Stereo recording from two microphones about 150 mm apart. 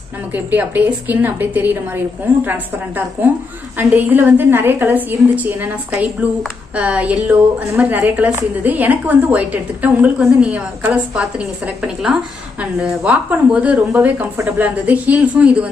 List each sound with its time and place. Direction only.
0.3 s a woman's voice: 10° right (ahead or behind)
3.7 s a woman's voice: 10° right (ahead or behind)